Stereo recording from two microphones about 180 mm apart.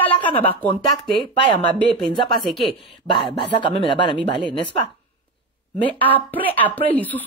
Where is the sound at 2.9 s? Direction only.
25° left (ahead or behind).